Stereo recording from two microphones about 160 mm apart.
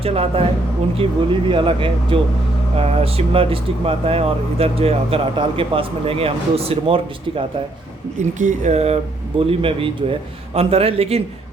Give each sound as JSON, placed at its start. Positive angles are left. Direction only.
{"t": 0.0, "sound": "speech", "side_deg": -35}
{"t": 8.2, "sound": "speech", "side_deg": -50}